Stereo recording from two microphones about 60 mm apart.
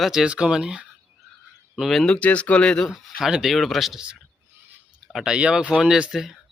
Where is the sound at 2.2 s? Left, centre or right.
Left.